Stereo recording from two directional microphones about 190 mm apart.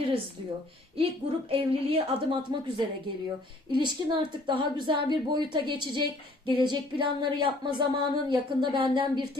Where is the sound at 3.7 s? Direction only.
25° right (ahead or behind).